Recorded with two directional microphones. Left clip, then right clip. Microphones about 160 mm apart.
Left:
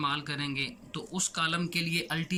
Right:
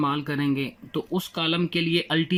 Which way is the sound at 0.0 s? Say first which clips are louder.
Right 6 dB; 45° right (ahead or behind).